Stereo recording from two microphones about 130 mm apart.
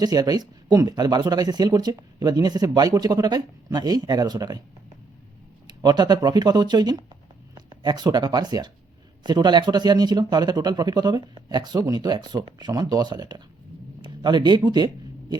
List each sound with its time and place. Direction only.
0.0 s speech: 30° right (ahead or behind)
5.6 s speech: 30° right (ahead or behind)